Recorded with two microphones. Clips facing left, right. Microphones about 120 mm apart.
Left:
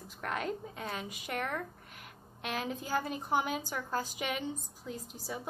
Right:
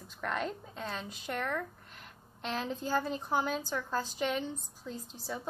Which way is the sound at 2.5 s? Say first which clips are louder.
Right 2 dB; 10° left (ahead or behind).